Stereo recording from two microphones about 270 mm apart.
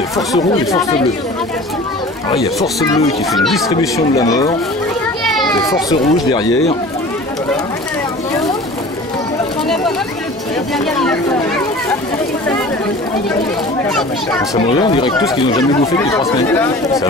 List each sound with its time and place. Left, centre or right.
2.6 s speech: centre
3.3 s speech: centre
3.6 s speech: centre
5.7 s speech: centre
11.0 s speech: centre
13.8 s speech: centre
14.5 s speech: centre